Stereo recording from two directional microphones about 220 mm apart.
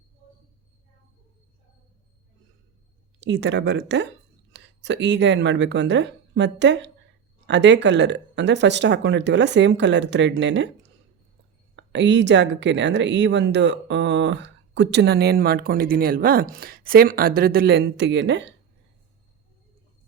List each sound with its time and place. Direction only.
3.2 s speech: 55° right (ahead or behind)
11.8 s speech: 55° right (ahead or behind)